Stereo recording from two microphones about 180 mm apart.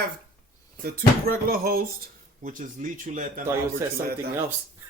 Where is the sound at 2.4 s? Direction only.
45° right (ahead or behind).